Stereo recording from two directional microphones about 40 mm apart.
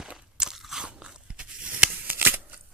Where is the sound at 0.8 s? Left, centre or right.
Right.